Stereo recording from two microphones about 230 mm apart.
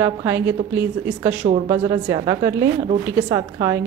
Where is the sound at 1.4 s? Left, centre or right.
Right.